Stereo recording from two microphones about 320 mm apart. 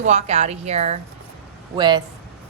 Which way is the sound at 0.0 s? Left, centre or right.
Centre.